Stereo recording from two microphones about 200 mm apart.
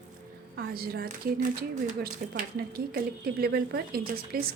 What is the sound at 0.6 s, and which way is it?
A woman's voice, 50° right (ahead or behind).